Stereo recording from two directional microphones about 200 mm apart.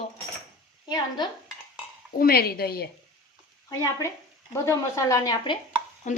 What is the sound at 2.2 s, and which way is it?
Speech, 50° left (ahead or behind).